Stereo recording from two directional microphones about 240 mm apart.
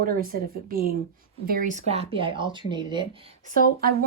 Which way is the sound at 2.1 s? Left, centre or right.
Right.